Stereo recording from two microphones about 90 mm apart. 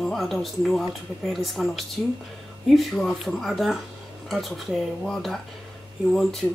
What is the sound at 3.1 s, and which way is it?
Speech, centre (ahead or behind).